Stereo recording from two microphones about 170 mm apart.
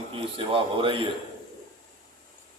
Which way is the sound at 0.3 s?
30° right (ahead or behind).